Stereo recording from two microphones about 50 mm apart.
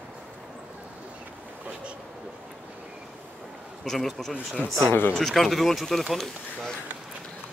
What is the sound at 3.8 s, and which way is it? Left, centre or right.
Speech, centre.